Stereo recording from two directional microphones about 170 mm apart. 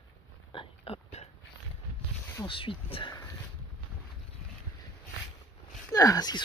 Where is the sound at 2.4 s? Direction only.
30° left (ahead or behind).